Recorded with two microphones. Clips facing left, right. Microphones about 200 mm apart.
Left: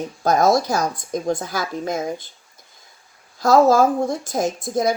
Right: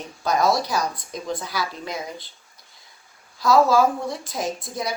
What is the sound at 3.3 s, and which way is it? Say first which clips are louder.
Speech: left 3 dB; 45° left (ahead or behind).